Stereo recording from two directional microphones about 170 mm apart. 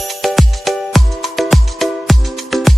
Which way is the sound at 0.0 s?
Centre (ahead or behind).